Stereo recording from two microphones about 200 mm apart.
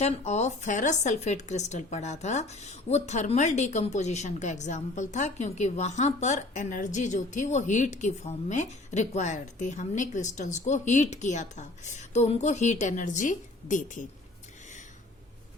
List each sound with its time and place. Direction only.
0.0 s speech: 35° left (ahead or behind)